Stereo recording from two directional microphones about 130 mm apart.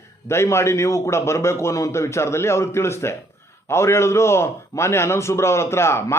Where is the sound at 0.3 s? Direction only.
20° left (ahead or behind).